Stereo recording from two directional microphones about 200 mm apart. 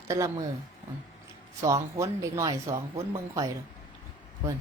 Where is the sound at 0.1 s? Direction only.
15° right (ahead or behind).